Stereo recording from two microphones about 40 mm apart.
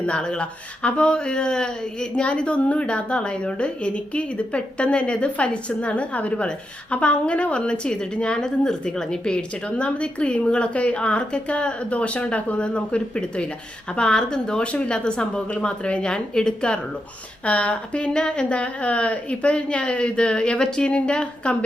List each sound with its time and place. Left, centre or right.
0.1 s speech: left
9.6 s speech: left
17.4 s speech: left